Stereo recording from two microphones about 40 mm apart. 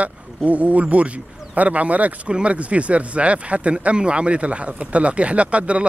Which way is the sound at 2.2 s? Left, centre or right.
Right.